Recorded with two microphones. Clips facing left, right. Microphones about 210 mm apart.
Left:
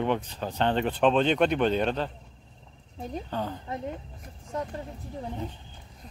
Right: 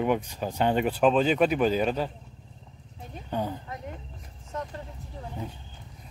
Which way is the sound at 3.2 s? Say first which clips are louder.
Right 4 dB; 15° right (ahead or behind).